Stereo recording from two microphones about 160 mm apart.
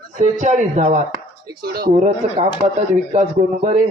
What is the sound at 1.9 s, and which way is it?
A man's voice, 40° right (ahead or behind).